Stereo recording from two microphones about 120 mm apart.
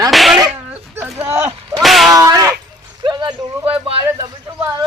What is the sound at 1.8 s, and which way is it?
Speech, centre (ahead or behind).